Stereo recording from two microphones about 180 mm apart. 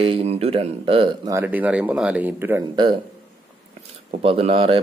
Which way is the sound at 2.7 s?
25° right (ahead or behind).